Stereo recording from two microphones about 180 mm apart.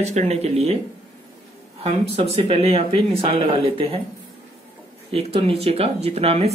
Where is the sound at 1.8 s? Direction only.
35° right (ahead or behind).